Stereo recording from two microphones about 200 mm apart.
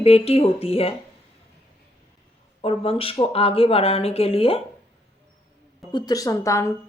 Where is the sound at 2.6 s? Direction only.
30° left (ahead or behind).